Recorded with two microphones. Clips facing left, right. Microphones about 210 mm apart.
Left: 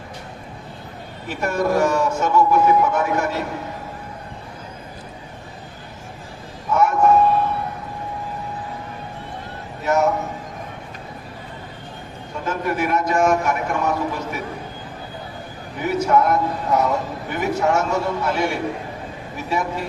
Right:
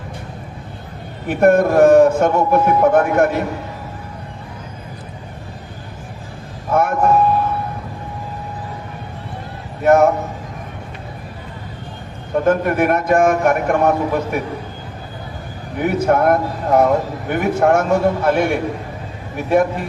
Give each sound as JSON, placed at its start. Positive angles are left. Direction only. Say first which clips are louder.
{"t": 1.3, "sound": "a man's voice", "louder": "right 8 dB", "side_deg": -55}
{"t": 6.7, "sound": "a sound", "louder": "right 1 dB", "side_deg": -55}
{"t": 9.8, "sound": "a man's voice", "louder": "right 7 dB", "side_deg": -55}
{"t": 12.3, "sound": "a man's voice", "louder": "right 9 dB", "side_deg": -55}
{"t": 15.8, "sound": "a man's voice", "louder": "right 3 dB", "side_deg": -55}